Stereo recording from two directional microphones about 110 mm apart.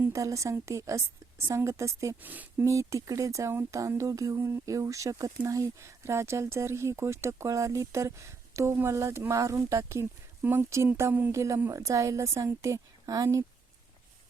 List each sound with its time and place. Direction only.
0.0 s speech: 30° right (ahead or behind)
2.2 s speech: 15° right (ahead or behind)
2.6 s speech: 30° right (ahead or behind)